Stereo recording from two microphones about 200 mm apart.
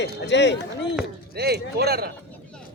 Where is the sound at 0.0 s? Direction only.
60° left (ahead or behind).